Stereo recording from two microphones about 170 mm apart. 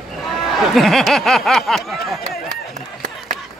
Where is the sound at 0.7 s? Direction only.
Centre (ahead or behind).